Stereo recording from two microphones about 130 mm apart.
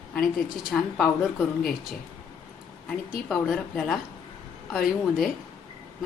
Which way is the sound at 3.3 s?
5° left (ahead or behind).